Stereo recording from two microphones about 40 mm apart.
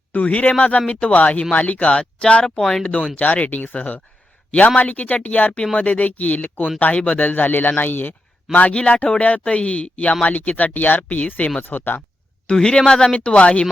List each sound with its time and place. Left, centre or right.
0.2 s speech: left
2.6 s a man's voice: centre
2.8 s speech: left
3.2 s speech: left
8.7 s speech: left
11.6 s speech: left
12.5 s a man's voice: centre
13.1 s speech: left